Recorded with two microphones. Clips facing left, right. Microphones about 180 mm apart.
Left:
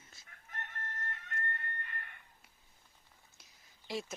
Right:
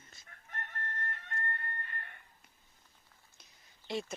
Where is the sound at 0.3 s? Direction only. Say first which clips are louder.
Right 2 dB; 40° right (ahead or behind).